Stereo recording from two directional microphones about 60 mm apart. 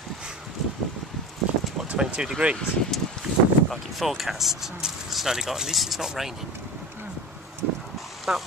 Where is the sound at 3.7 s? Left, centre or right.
Centre.